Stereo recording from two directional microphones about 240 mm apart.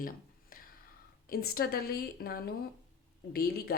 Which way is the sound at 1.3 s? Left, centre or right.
Left.